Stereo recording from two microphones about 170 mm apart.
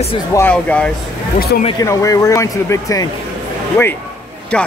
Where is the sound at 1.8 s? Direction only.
20° left (ahead or behind).